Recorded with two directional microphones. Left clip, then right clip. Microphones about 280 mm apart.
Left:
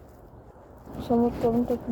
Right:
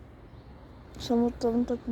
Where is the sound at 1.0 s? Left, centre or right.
Right.